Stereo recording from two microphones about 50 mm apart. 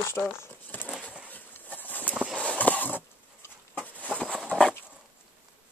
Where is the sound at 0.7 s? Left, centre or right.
Left.